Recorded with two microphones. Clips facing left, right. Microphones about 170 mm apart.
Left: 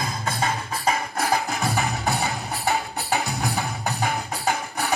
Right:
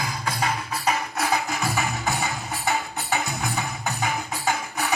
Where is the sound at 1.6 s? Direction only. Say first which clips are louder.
Left 1 dB; 35° left (ahead or behind).